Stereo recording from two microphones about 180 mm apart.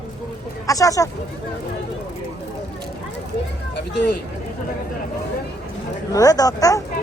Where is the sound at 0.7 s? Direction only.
20° left (ahead or behind).